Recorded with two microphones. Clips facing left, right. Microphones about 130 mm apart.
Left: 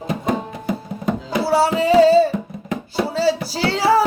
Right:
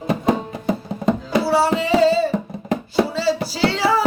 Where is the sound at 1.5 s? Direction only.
45° left (ahead or behind).